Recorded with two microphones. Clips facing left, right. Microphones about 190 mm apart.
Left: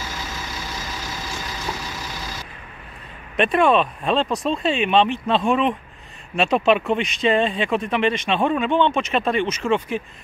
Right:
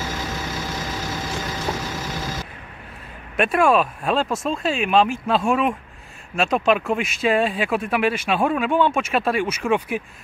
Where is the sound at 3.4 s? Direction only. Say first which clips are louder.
Even; centre (ahead or behind).